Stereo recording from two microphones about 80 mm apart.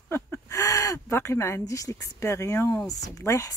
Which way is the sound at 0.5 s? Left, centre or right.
Left.